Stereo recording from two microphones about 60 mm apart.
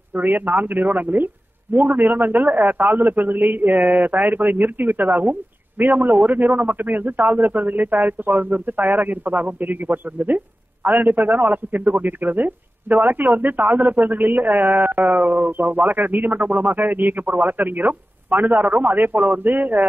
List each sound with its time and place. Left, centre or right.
0.1 s speech: right